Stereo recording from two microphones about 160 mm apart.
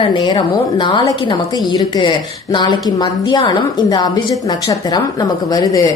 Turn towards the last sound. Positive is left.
turn(degrees=25)  # may be behind; listen again after turning